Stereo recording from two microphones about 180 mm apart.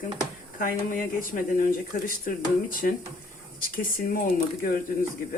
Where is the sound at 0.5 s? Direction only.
50° left (ahead or behind).